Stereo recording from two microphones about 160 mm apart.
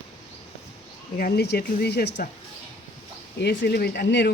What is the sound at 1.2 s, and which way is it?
Speech, 80° left.